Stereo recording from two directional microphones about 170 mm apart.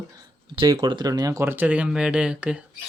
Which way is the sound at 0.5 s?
25° right (ahead or behind).